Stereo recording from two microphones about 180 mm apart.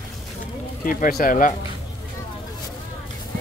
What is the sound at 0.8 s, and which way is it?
Speech, 50° left (ahead or behind).